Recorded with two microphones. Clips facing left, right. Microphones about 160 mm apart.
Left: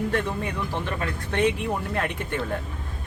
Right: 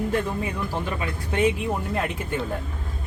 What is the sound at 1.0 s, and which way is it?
Speech, 10° right (ahead or behind).